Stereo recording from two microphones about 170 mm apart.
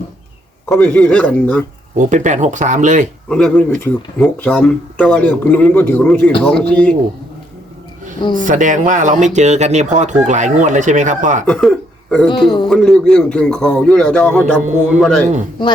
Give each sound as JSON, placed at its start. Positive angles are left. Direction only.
{"t": 0.8, "sound": "speech", "side_deg": 5}
{"t": 2.0, "sound": "speech", "side_deg": -45}
{"t": 3.2, "sound": "a man's voice", "side_deg": 5}
{"t": 8.2, "sound": "a man's voice", "side_deg": 25}
{"t": 8.4, "sound": "speech", "side_deg": -45}
{"t": 11.4, "sound": "a man's voice", "side_deg": 0}
{"t": 12.3, "sound": "a man's voice", "side_deg": 25}
{"t": 12.6, "sound": "a man's voice", "side_deg": 0}